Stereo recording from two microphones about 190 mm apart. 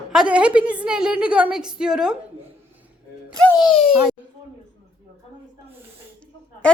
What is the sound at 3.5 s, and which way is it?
Speech, 20° left (ahead or behind).